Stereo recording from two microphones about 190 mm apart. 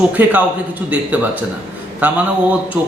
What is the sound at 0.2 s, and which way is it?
A man's voice, 10° right (ahead or behind).